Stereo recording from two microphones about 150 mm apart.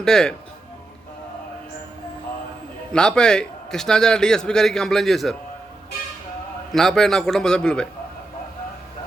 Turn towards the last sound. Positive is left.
turn(degrees=5)  # may be behind; listen again after turning